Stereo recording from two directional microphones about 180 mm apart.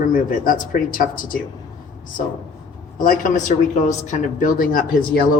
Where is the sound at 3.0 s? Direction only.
45° left (ahead or behind).